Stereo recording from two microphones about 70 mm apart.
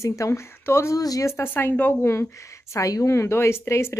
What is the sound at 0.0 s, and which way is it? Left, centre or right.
Speech, left.